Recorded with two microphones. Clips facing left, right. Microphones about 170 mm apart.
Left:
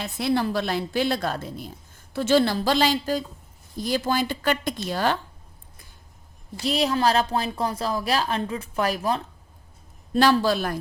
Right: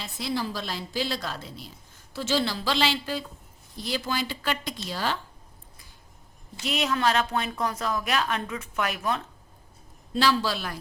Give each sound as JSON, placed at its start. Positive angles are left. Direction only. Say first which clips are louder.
{"t": 0.0, "sound": "a woman's voice", "louder": "left 6 dB", "side_deg": 60}
{"t": 6.6, "sound": "a woman's voice", "louder": "left 4 dB", "side_deg": 35}
{"t": 10.2, "sound": "a woman's voice", "louder": "left 5 dB", "side_deg": 50}